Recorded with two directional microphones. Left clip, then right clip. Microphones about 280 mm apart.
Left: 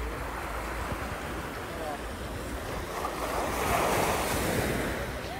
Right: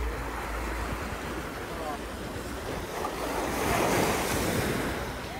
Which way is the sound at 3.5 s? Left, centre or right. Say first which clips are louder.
Right 1 dB; right.